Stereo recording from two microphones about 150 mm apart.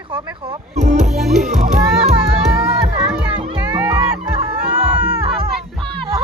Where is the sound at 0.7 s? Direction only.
50° right (ahead or behind).